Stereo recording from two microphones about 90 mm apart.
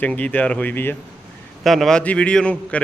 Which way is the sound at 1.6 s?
Centre (ahead or behind).